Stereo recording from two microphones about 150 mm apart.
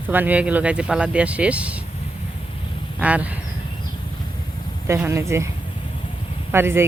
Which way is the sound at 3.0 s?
10° right (ahead or behind).